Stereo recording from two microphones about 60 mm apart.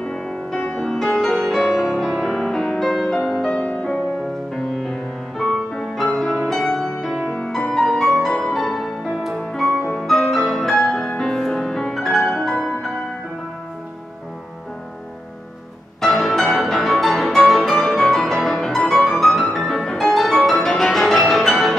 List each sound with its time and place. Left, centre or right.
0.0 s music: centre
3.6 s music: left
4.6 s music: centre
6.6 s music: centre
7.3 s music: centre
9.5 s music: centre
16.0 s music: centre